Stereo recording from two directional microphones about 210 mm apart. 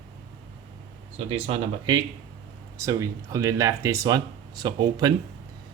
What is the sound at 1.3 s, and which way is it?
Speech, 30° right (ahead or behind).